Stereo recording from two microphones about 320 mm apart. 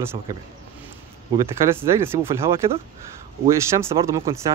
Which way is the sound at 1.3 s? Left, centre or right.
Centre.